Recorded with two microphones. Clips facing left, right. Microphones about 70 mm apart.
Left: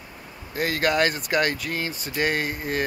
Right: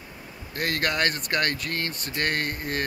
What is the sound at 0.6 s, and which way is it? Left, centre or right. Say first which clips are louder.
Speech: left 4 dB; centre.